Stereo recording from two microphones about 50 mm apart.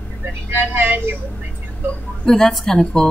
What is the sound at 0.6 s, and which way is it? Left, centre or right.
Speech, right.